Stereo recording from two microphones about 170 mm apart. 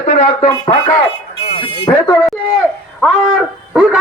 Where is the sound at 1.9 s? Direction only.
20° left (ahead or behind).